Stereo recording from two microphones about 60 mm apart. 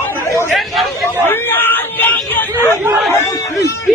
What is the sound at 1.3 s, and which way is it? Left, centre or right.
Chatter, left.